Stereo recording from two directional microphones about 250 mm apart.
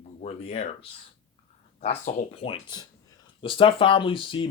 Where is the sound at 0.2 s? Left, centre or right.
Left.